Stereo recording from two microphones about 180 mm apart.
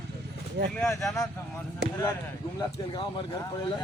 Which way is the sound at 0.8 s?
10° left (ahead or behind).